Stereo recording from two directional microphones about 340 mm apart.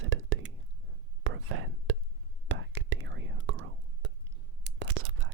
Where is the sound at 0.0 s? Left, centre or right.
Right.